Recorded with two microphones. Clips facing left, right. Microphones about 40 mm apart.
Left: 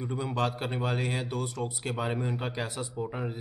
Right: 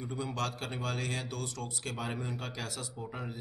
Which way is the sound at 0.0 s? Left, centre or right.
Left.